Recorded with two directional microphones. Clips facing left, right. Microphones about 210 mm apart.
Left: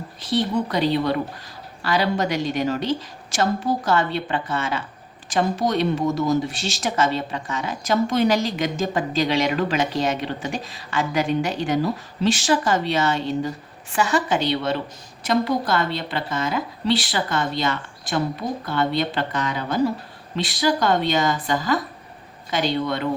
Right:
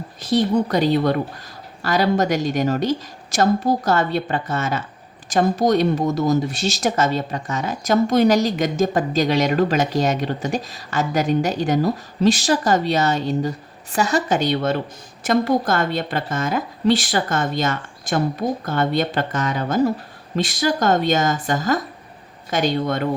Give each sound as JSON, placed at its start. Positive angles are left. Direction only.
{"t": 0.2, "sound": "a woman's voice", "side_deg": -45}